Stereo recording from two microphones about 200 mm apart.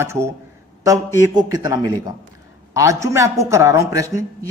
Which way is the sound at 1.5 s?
20° right (ahead or behind).